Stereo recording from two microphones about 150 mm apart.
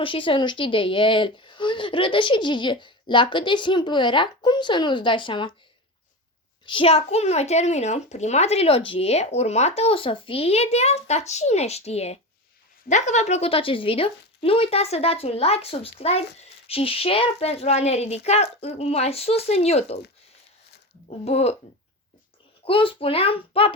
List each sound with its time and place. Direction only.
0.0 s a woman's voice: 35° left (ahead or behind)
6.7 s speech: 40° left (ahead or behind)
21.2 s speech: 45° left (ahead or behind)
22.6 s a woman's voice: 35° left (ahead or behind)